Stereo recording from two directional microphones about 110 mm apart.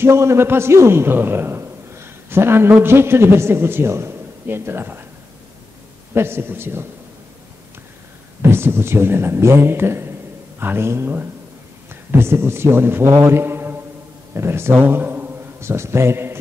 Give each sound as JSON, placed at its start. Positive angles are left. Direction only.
{"t": 0.0, "sound": "a man's voice", "side_deg": -25}
{"t": 6.1, "sound": "speech", "side_deg": -20}
{"t": 8.4, "sound": "a man's voice", "side_deg": -20}